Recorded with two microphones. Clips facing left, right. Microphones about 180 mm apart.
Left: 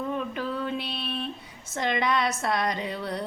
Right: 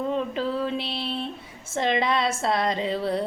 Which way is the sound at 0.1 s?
25° right (ahead or behind).